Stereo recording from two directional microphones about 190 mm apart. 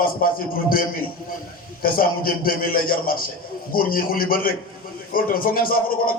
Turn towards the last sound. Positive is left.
turn(degrees=50)  # may be behind; listen again after turning